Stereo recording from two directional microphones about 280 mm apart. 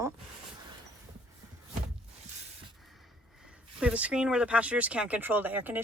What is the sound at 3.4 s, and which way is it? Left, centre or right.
Speech, centre.